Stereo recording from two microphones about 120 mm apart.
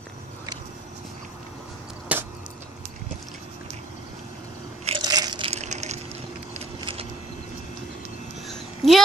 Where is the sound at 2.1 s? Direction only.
10° right (ahead or behind).